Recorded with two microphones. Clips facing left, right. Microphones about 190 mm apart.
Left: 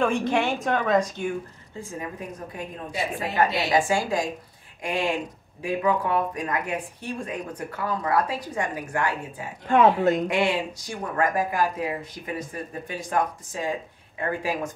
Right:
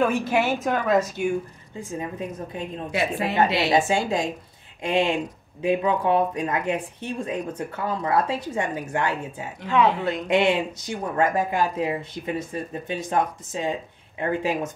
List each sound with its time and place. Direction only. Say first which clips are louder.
0.0 s a woman's voice: right 1 dB; 5° right (ahead or behind)
1.8 s speech: right 4 dB; 25° right (ahead or behind)
2.9 s a woman's voice: right 5 dB; 75° right (ahead or behind)
3.7 s speech: right 1 dB; 25° right (ahead or behind)
9.7 s speech: left 3 dB; 45° left (ahead or behind)
10.2 s speech: right 3 dB; 25° right (ahead or behind)